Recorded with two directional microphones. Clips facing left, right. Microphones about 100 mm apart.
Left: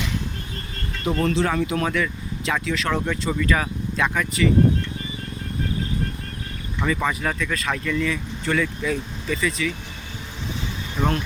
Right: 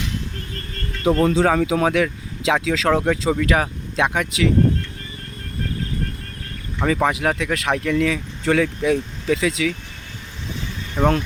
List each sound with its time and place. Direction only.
1.1 s speech: 90° right
3.4 s speech: 70° right (ahead or behind); by 4.5 s 85° right
6.8 s speech: 65° right (ahead or behind); by 9.7 s 90° right